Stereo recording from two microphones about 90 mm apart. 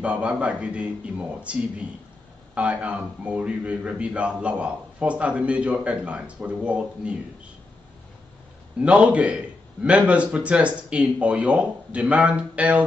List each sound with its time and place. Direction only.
0.0 s a man's voice: 15° right (ahead or behind)
8.7 s a man's voice: 15° right (ahead or behind)